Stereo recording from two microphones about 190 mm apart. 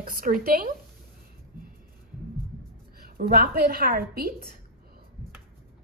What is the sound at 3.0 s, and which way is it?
A woman's voice, 55° right (ahead or behind).